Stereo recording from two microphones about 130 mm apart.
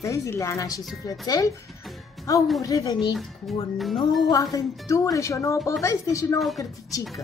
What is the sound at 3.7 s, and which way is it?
Speech, centre (ahead or behind).